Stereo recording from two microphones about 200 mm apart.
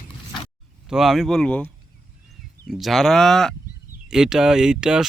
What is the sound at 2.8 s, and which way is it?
Speech, centre (ahead or behind).